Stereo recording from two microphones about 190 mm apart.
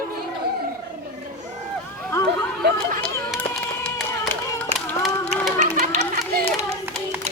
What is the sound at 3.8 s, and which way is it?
Clapping, 5° left (ahead or behind).